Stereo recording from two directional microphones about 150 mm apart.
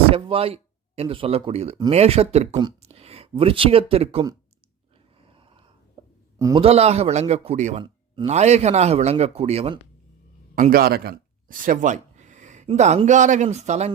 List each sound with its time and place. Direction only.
0.1 s a man's voice: 40° right (ahead or behind)
5.3 s wheeze: 35° right (ahead or behind)
6.0 s a sound: 30° right (ahead or behind)
6.6 s a man's voice: 45° right (ahead or behind)
10.5 s a sound: 70° right (ahead or behind); by 12.6 s 55° right (ahead or behind)
12.6 s a man's voice: 50° right (ahead or behind)